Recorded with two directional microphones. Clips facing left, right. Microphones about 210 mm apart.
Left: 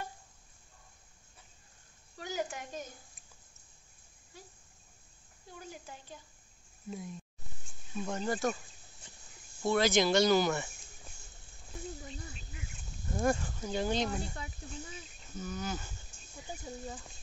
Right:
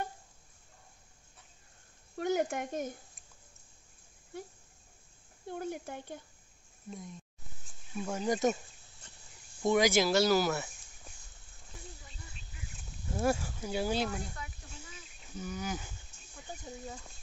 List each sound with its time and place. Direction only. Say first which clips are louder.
2.1 s a sound: right 7 dB; 55° right (ahead or behind)
5.5 s speech: right 10 dB; 60° right (ahead or behind)
6.9 s speech: left 3 dB; centre (ahead or behind)
7.9 s speech: right 2 dB; 10° right (ahead or behind)
9.0 s a sound: left 1 dB; 10° left (ahead or behind)
9.6 s speech: right 1 dB; 15° right (ahead or behind)
13.1 s speech: even; 5° right (ahead or behind)
15.3 s speech: even; 10° right (ahead or behind)
16.8 s speech: left 1 dB; centre (ahead or behind)